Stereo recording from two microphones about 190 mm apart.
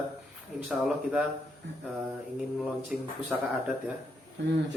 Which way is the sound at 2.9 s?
5° right (ahead or behind).